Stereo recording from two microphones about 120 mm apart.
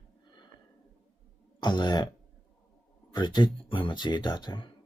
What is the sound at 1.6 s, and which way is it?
Speech, 40° left (ahead or behind).